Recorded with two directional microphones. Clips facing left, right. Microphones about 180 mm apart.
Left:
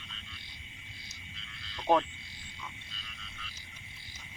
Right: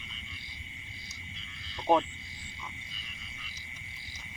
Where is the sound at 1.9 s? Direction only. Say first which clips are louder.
Right 1 dB; 10° right (ahead or behind).